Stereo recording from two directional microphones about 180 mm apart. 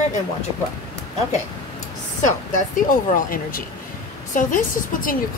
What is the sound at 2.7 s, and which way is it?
Speech, 50° left (ahead or behind).